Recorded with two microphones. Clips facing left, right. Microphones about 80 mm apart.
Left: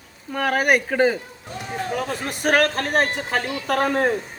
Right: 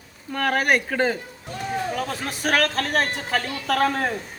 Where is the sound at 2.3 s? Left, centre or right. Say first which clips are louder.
Left 4 dB; left.